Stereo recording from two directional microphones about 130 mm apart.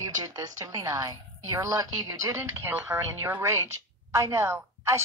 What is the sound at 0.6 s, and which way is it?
A woman's voice, 25° right (ahead or behind).